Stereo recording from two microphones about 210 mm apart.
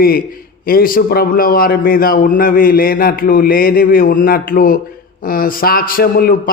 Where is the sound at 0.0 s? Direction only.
45° left (ahead or behind).